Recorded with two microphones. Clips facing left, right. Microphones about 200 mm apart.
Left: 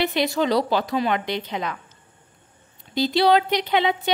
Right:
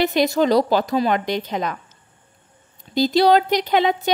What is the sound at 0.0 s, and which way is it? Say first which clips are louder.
A woman's voice: right 4 dB; 40° right (ahead or behind).